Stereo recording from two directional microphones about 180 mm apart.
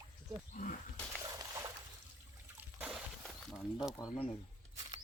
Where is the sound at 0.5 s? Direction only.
45° left (ahead or behind).